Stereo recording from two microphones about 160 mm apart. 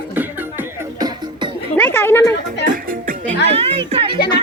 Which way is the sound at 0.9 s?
25° right (ahead or behind).